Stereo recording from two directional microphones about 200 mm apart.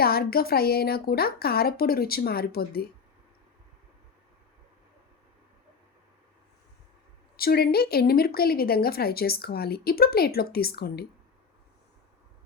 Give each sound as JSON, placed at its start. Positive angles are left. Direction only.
{"t": 0.0, "sound": "speech", "side_deg": 50}
{"t": 7.3, "sound": "speech", "side_deg": 50}